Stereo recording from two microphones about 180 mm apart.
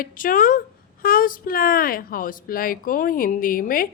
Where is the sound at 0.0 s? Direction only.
50° left (ahead or behind).